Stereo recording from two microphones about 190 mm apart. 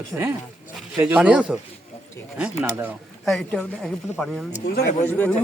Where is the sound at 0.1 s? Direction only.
Centre (ahead or behind).